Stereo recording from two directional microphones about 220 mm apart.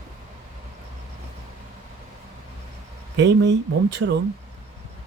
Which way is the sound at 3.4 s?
55° right (ahead or behind).